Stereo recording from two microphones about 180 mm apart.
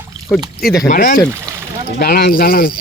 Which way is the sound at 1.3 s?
15° right (ahead or behind).